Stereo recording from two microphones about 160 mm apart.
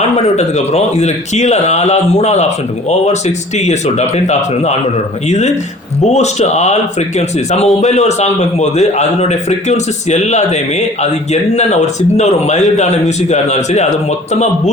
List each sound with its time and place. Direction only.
0.2 s a man's voice: 40° left (ahead or behind)